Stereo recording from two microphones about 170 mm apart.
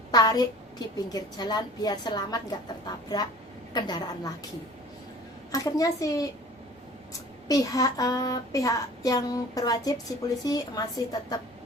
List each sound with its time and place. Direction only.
0.1 s a sound: 20° left (ahead or behind)
0.9 s speech: 20° left (ahead or behind)
5.5 s speech: 20° left (ahead or behind)